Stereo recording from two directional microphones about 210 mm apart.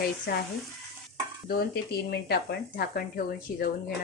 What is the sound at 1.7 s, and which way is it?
A woman's voice, 50° left (ahead or behind).